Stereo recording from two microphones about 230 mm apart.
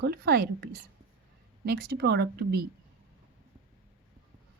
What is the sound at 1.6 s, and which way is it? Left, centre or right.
A woman's voice, right.